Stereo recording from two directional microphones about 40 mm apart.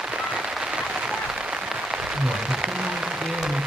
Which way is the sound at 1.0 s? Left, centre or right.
Right.